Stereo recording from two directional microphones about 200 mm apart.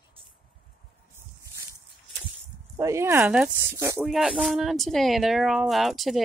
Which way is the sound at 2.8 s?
15° right (ahead or behind).